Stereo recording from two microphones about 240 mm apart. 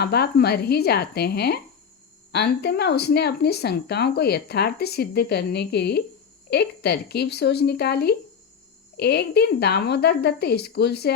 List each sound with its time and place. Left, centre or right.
0.0 s speech: left